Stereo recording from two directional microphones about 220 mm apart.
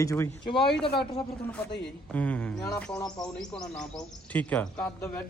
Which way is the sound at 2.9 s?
15° left (ahead or behind).